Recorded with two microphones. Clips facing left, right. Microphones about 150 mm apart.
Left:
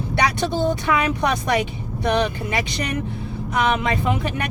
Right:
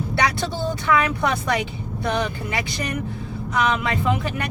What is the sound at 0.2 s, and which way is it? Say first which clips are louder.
Speech: left 3 dB; 15° left (ahead or behind).